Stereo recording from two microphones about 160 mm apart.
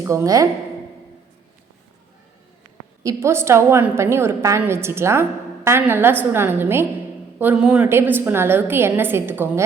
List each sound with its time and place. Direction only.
0.0 s a woman's voice: 15° right (ahead or behind)
3.0 s a woman's voice: 20° right (ahead or behind)